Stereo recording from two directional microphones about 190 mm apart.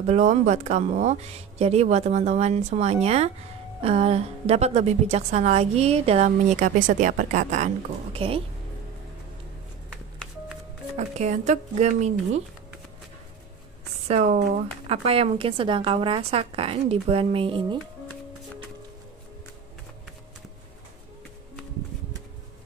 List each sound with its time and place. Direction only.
0.0 s a woman's voice: 35° right (ahead or behind)
11.0 s a woman's voice: 35° right (ahead or behind)
14.0 s a woman's voice: 35° right (ahead or behind)